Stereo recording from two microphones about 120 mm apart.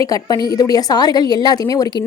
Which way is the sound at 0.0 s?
30° left (ahead or behind).